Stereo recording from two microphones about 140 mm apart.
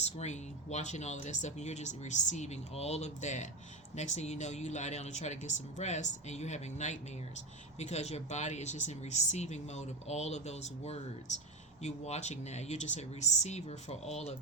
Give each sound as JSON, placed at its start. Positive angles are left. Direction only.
{"t": 0.0, "sound": "speech", "side_deg": 50}